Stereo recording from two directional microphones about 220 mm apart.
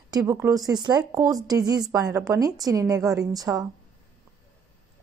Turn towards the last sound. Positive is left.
turn(degrees=-15)  # may be behind; listen again after turning